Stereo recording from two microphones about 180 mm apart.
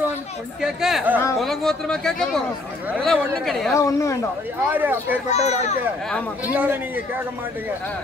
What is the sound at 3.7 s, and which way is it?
Speech, 15° left (ahead or behind).